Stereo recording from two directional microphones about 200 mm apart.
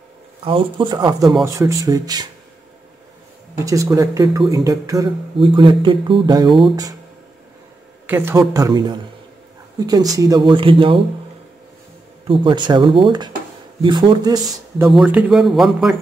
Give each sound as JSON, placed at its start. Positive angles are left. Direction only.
{"t": 0.4, "sound": "speech", "side_deg": -25}
{"t": 3.5, "sound": "speech", "side_deg": -15}
{"t": 8.1, "sound": "speech", "side_deg": -15}
{"t": 12.3, "sound": "speech", "side_deg": -25}
{"t": 14.9, "sound": "speech", "side_deg": -5}